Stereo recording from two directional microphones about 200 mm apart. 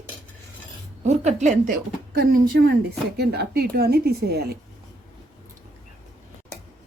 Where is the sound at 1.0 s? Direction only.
35° right (ahead or behind); by 4.5 s 55° right (ahead or behind).